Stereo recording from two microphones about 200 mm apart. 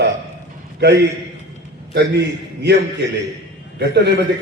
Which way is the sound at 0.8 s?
60° right (ahead or behind).